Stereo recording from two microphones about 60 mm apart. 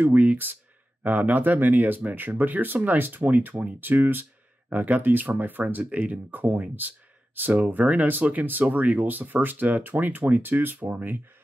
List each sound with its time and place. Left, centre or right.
0.0 s speech: right